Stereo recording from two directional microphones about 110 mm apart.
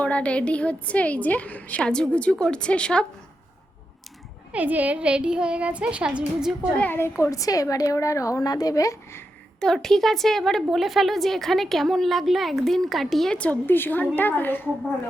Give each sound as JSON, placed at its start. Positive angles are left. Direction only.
{"t": 0.0, "sound": "a woman's voice", "side_deg": 10}
{"t": 4.5, "sound": "a child's voice", "side_deg": -15}
{"t": 6.7, "sound": "a woman's voice", "side_deg": 20}
{"t": 9.6, "sound": "a woman's voice", "side_deg": 5}